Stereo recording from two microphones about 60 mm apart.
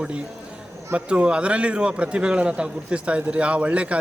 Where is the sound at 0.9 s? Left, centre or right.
Centre.